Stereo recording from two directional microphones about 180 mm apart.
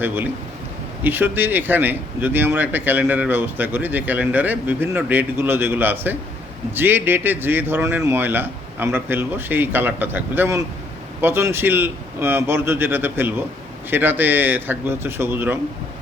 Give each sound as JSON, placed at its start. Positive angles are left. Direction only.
{"t": 1.0, "sound": "speech", "side_deg": -10}